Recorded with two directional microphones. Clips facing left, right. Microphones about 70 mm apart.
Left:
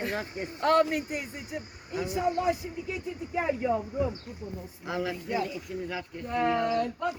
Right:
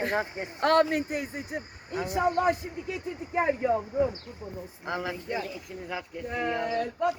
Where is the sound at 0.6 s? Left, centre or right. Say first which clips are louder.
Right 1 dB; right.